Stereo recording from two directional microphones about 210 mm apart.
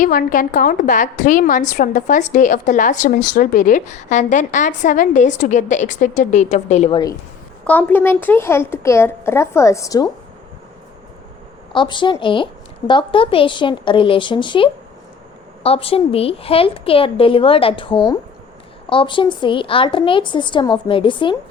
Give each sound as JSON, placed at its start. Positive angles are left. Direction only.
{"t": 0.0, "sound": "speech", "side_deg": 40}
{"t": 7.6, "sound": "a woman's voice", "side_deg": 5}
{"t": 11.7, "sound": "a woman's voice", "side_deg": 20}